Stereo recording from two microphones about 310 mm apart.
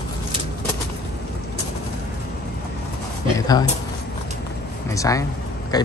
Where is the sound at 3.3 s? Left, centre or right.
Centre.